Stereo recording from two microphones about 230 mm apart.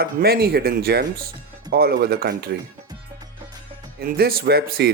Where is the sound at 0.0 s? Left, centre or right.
Right.